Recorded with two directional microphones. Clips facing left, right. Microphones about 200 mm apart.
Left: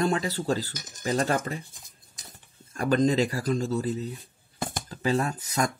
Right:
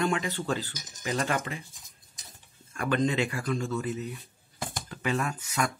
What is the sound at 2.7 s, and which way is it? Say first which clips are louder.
Speech: left 4 dB; 35° left (ahead or behind).